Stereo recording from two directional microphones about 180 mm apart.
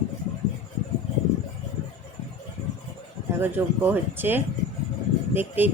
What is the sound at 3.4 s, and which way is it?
A woman's voice, 10° right (ahead or behind).